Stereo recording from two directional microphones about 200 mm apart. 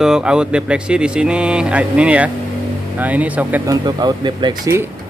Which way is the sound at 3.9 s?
20° right (ahead or behind).